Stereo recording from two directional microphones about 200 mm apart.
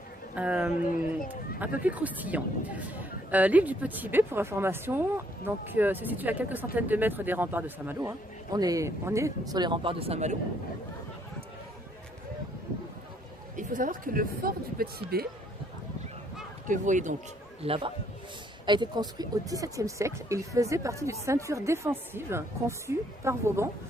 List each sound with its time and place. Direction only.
0.3 s speech: 5° right (ahead or behind)
0.9 s speech: 45° left (ahead or behind)
1.5 s speech: 10° right (ahead or behind); by 10.3 s 30° right (ahead or behind)
13.6 s speech: 40° right (ahead or behind)
16.6 s speech: 40° right (ahead or behind)
17.6 s speech: 25° right (ahead or behind)